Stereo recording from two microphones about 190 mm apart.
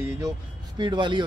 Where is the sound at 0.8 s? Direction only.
25° right (ahead or behind).